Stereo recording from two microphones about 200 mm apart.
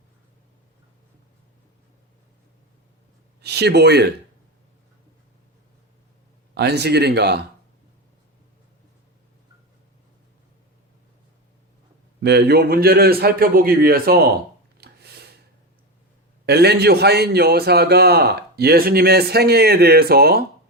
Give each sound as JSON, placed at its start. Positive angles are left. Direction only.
{"t": 3.4, "sound": "speech", "side_deg": -55}
{"t": 6.5, "sound": "speech", "side_deg": -55}
{"t": 12.2, "sound": "a man's voice", "side_deg": -55}
{"t": 14.8, "sound": "a sound", "side_deg": -55}
{"t": 16.5, "sound": "a man's voice", "side_deg": -55}